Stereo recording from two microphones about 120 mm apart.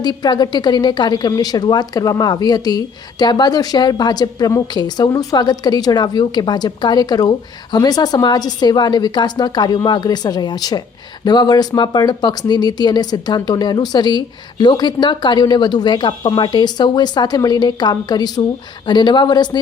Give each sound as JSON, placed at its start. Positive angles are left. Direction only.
{"t": 0.0, "sound": "a woman's voice", "side_deg": 35}